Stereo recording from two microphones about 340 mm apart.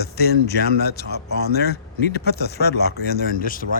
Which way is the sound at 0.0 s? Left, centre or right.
Left.